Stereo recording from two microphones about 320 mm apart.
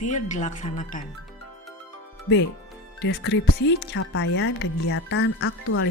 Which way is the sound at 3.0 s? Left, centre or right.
Left.